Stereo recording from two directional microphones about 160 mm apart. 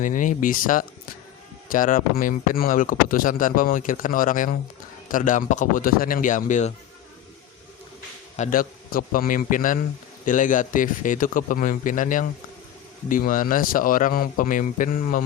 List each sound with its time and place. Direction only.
0.0 s speech: 55° left (ahead or behind)
8.4 s speech: 60° left (ahead or behind)